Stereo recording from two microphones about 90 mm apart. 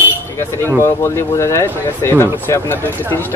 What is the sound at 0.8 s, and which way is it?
Speech, 30° left (ahead or behind).